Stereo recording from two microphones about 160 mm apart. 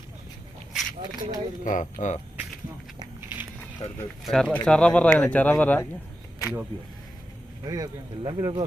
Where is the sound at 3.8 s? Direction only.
40° left (ahead or behind).